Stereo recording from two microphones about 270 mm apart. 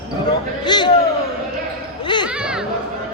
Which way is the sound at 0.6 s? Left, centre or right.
Centre.